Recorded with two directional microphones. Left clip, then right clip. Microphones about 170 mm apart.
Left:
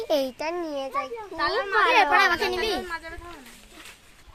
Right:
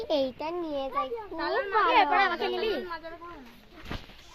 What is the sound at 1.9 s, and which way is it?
Speech, 80° left.